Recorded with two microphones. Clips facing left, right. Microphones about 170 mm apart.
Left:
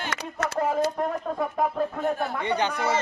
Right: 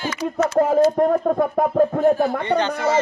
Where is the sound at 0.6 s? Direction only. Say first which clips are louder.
Right 9 dB; 50° right (ahead or behind).